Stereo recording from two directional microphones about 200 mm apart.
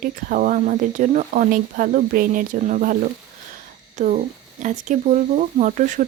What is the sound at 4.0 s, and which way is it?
Speech, 35° right (ahead or behind).